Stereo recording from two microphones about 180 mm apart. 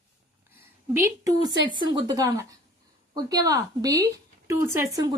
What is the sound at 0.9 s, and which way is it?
Speech, 15° right (ahead or behind).